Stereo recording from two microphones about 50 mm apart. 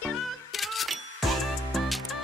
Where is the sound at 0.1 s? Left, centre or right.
Centre.